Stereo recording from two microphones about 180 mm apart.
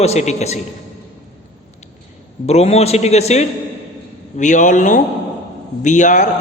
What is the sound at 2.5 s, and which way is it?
A man's voice, 35° left (ahead or behind).